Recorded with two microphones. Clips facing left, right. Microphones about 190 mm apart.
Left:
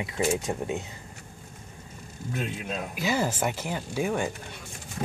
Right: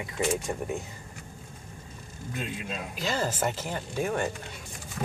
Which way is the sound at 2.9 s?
10° left (ahead or behind).